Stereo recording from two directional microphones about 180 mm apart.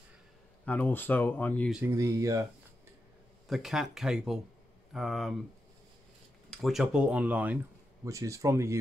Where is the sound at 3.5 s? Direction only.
Centre (ahead or behind).